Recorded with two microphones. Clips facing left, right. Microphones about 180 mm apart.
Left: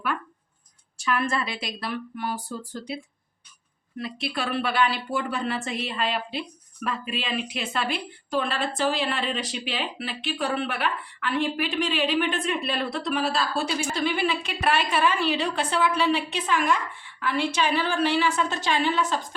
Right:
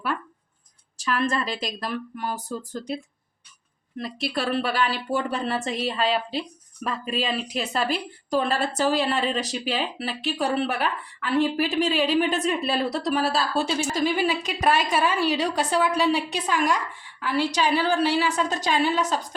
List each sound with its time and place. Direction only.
0.9 s a woman's voice: 35° right (ahead or behind)
4.4 s a woman's voice: 40° right (ahead or behind)
13.6 s a woman's voice: centre (ahead or behind)
13.9 s a woman's voice: 40° right (ahead or behind)